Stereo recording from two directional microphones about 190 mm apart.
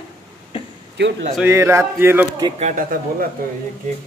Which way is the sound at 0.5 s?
30° left (ahead or behind).